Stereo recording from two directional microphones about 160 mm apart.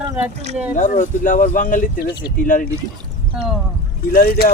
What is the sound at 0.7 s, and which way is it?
Speech, 50° left (ahead or behind).